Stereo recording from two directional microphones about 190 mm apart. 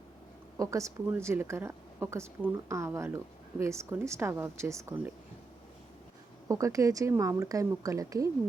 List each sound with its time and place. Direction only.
0.5 s a woman's voice: 15° right (ahead or behind)
6.5 s a woman's voice: 15° right (ahead or behind)